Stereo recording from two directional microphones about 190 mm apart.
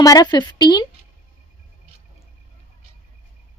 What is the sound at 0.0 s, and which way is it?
Speech, 20° left (ahead or behind).